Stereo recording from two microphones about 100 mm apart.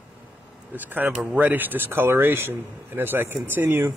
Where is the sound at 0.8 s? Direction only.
15° right (ahead or behind).